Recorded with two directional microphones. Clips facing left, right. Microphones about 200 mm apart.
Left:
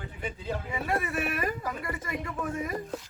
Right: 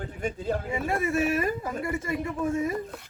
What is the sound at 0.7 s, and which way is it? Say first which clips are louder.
Speech: right 1 dB; 25° right (ahead or behind).